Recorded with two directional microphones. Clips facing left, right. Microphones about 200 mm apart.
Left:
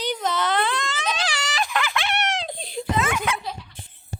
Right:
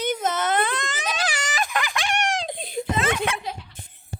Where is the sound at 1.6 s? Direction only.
45° right (ahead or behind).